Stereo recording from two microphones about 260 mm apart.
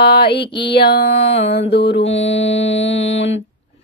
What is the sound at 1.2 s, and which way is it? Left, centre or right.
Mantra, left.